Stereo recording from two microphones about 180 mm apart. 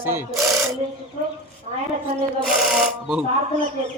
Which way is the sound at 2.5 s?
Centre (ahead or behind).